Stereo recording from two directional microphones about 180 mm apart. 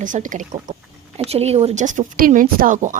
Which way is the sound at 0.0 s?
45° right (ahead or behind).